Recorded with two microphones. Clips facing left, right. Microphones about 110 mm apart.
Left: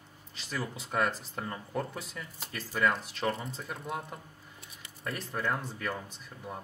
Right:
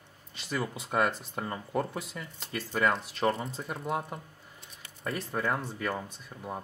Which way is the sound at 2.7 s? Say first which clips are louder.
Right 1 dB; 30° right (ahead or behind).